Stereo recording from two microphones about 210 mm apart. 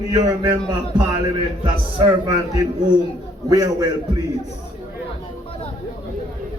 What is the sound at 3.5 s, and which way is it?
Speech, 15° right (ahead or behind).